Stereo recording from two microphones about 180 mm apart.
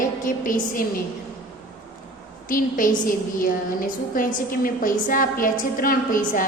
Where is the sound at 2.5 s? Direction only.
50° left (ahead or behind).